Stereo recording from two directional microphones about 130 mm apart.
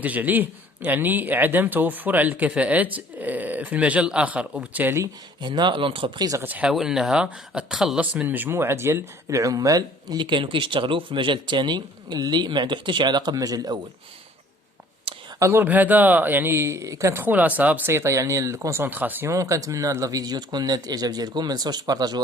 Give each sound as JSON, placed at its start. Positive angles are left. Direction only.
{"t": 0.0, "sound": "speech", "side_deg": -10}
{"t": 5.4, "sound": "speech", "side_deg": -35}
{"t": 6.4, "sound": "speech", "side_deg": -10}
{"t": 15.4, "sound": "speech", "side_deg": -20}